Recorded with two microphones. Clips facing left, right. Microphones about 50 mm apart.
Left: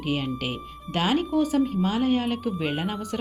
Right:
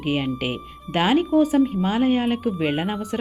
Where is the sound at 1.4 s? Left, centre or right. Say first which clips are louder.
Right 4 dB; centre.